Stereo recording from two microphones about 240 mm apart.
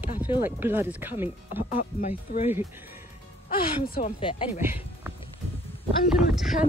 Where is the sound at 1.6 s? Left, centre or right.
Left.